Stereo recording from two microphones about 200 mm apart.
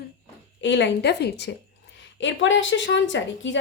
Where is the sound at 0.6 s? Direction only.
65° left (ahead or behind).